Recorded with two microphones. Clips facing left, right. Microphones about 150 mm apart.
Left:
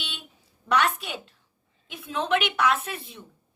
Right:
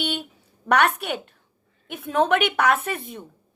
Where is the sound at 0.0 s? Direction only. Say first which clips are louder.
Right 14 dB; 65° right (ahead or behind).